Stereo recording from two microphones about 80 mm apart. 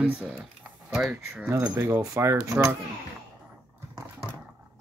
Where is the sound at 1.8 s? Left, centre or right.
Right.